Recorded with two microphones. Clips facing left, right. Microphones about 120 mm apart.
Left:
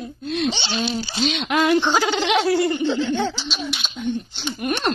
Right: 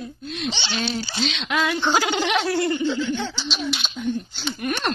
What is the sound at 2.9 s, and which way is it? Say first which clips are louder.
Speech: left 3 dB; 60° left (ahead or behind).